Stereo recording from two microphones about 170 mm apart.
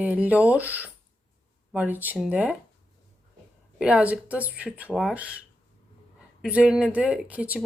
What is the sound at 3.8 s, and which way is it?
A woman's voice, 5° right (ahead or behind).